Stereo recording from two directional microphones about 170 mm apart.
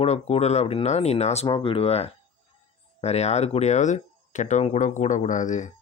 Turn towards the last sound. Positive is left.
turn(degrees=45)  # may be behind; listen again after turning